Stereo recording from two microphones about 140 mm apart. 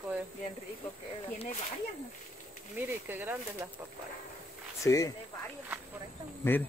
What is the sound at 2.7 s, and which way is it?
Speech, 15° right (ahead or behind).